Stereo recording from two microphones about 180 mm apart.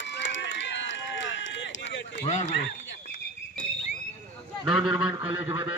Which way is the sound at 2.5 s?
80° left.